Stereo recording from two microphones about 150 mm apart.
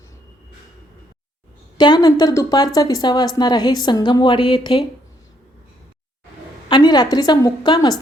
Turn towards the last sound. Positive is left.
turn(degrees=30)  # may be behind; listen again after turning